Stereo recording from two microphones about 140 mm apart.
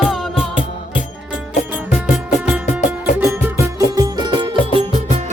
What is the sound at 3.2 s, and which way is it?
Music, 20° right (ahead or behind).